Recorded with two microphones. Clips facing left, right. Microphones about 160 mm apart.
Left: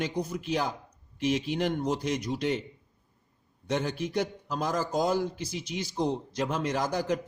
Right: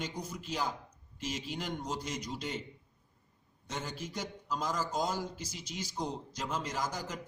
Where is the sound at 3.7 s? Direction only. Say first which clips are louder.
Left 10 dB; 65° left (ahead or behind).